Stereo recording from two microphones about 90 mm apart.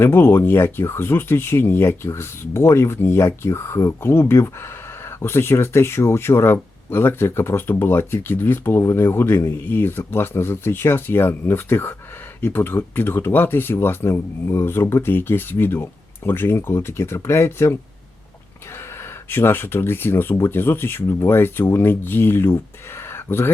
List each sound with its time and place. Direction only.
0.0 s speech: 25° left (ahead or behind)
19.3 s speech: 25° left (ahead or behind)